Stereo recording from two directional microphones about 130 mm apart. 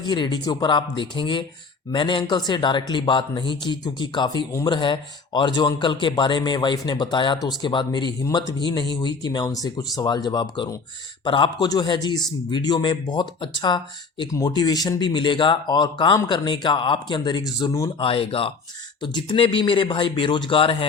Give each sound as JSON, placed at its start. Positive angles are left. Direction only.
{"t": 0.0, "sound": "speech", "side_deg": 35}
{"t": 18.0, "sound": "speech", "side_deg": 45}